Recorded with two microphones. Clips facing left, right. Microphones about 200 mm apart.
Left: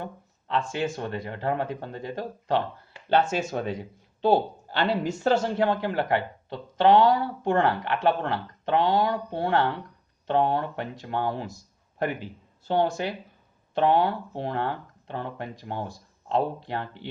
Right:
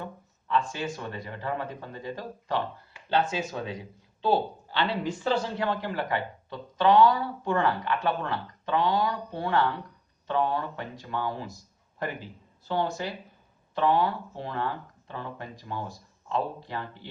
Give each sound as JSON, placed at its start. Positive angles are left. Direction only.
{"t": 0.0, "sound": "speech", "side_deg": 60}
{"t": 3.1, "sound": "speech", "side_deg": 45}